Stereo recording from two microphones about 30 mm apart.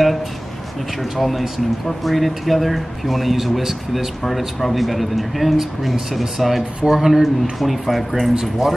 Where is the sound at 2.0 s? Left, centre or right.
Centre.